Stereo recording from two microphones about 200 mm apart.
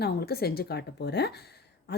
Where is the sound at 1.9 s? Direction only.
55° left (ahead or behind).